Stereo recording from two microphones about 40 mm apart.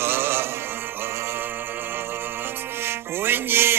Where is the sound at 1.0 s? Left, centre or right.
Right.